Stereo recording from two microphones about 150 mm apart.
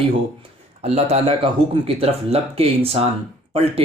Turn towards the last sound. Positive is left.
turn(degrees=-40)  # may be behind; listen again after turning